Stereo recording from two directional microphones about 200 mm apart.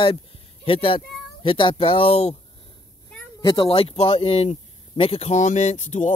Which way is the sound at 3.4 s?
25° left (ahead or behind).